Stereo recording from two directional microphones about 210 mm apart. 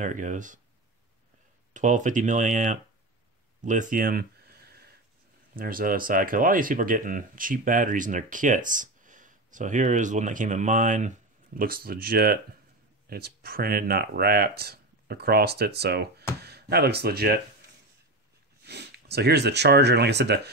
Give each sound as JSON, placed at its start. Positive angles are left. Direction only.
{"t": 0.0, "sound": "speech", "side_deg": -35}
{"t": 1.7, "sound": "speech", "side_deg": -35}
{"t": 3.6, "sound": "a sound", "side_deg": -40}
{"t": 5.6, "sound": "speech", "side_deg": -45}
{"t": 18.6, "sound": "speech", "side_deg": -50}